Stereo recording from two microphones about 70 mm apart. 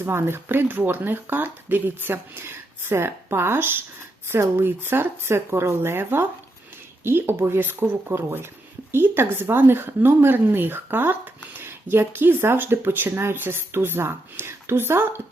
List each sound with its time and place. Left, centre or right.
0.0 s a woman's voice: right